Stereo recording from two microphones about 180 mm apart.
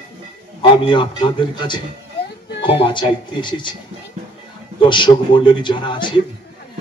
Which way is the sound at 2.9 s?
25° left (ahead or behind).